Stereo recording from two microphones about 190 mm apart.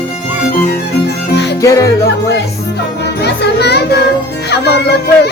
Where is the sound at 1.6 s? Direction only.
15° left (ahead or behind).